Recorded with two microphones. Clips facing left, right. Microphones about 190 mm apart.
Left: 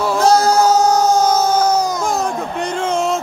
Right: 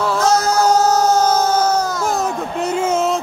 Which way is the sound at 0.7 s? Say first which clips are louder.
Left 1 dB; 10° left (ahead or behind).